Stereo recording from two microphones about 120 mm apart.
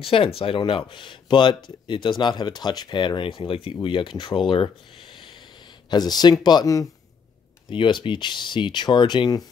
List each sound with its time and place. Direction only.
0.0 s speech: 50° left (ahead or behind); by 6.9 s 30° left (ahead or behind)
7.7 s speech: 45° left (ahead or behind)